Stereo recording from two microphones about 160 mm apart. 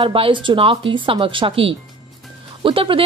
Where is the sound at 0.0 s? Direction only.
35° right (ahead or behind).